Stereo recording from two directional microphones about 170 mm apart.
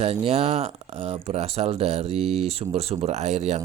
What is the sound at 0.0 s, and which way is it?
Speech, 35° right (ahead or behind).